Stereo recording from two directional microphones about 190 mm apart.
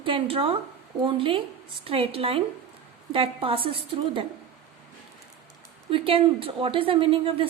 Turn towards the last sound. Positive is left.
turn(degrees=-30)  # may be behind; listen again after turning